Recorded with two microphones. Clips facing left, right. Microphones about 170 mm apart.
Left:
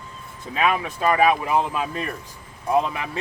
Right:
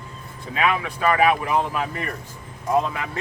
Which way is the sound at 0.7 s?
20° left (ahead or behind).